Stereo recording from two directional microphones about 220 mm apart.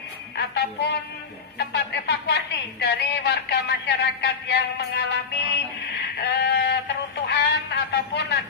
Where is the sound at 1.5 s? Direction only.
50° left (ahead or behind).